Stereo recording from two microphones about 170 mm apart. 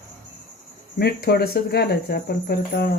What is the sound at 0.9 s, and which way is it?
Speech, 65° left (ahead or behind).